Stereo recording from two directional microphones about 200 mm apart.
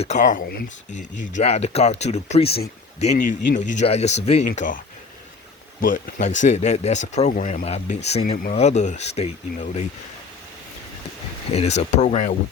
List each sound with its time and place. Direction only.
0.0 s speech: 35° left (ahead or behind)
5.8 s speech: 40° left (ahead or behind)
11.5 s speech: 35° left (ahead or behind)